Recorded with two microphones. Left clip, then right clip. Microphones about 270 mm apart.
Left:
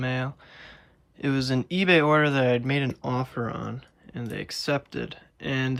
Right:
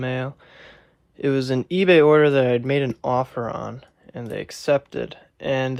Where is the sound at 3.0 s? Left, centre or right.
Centre.